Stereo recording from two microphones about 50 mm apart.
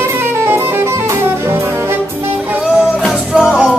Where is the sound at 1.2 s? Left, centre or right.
Right.